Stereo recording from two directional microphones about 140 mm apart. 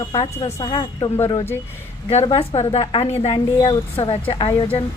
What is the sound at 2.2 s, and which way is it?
A woman's voice, 45° left (ahead or behind).